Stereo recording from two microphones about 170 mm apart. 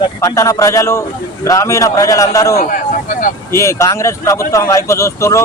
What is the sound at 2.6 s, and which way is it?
Speech, 50° left (ahead or behind).